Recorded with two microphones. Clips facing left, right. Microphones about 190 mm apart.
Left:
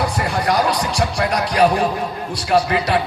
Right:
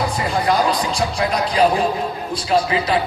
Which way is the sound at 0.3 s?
70° left (ahead or behind).